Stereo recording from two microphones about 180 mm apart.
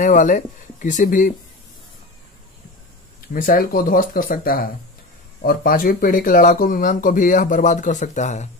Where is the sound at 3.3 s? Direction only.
50° left (ahead or behind).